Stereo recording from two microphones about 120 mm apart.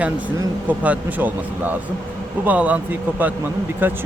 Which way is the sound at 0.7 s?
15° right (ahead or behind).